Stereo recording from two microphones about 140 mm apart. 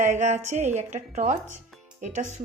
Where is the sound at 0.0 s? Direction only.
60° right (ahead or behind).